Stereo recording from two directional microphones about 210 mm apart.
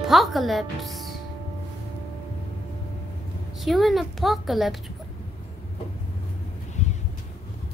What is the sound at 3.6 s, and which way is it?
A woman's voice, centre (ahead or behind).